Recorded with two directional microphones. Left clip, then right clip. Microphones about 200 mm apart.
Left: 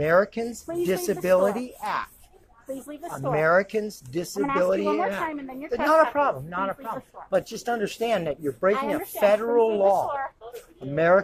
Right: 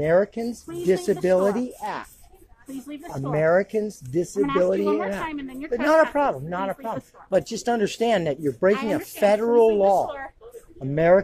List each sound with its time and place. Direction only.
0.0 s speech: 35° right (ahead or behind)
3.3 s speech: 40° right (ahead or behind)
5.3 s a woman's voice: 60° right (ahead or behind)
5.7 s speech: 45° right (ahead or behind)